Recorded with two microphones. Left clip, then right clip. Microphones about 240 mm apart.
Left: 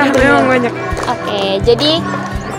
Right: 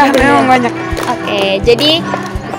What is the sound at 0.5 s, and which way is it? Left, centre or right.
Speech, right.